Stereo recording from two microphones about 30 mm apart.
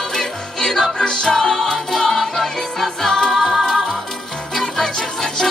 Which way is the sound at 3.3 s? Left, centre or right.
Centre.